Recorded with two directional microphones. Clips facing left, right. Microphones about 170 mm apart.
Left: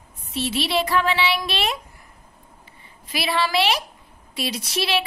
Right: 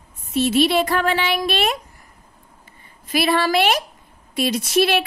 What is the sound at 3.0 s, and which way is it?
Speech, 50° right (ahead or behind).